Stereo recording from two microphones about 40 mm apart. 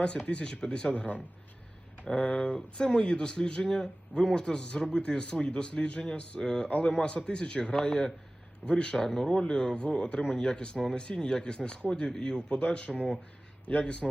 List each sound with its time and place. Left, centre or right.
0.3 s speech: left
2.6 s speech: left
9.0 s speech: centre
9.3 s speech: left